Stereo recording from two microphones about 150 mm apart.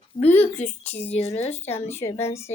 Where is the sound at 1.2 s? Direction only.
45° left (ahead or behind).